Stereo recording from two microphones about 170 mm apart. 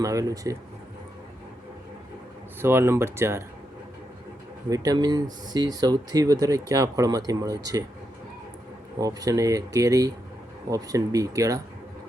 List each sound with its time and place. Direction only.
0.0 s speech: 20° right (ahead or behind)
2.6 s speech: 15° right (ahead or behind)
4.7 s speech: 20° right (ahead or behind)
9.0 s speech: 20° right (ahead or behind)